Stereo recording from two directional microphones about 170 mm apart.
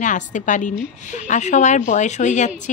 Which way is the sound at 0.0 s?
45° left (ahead or behind).